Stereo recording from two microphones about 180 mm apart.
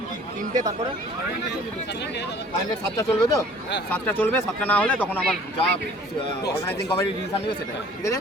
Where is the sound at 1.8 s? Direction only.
70° left (ahead or behind).